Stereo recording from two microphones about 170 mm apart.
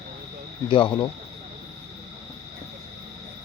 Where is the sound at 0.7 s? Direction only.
30° left (ahead or behind).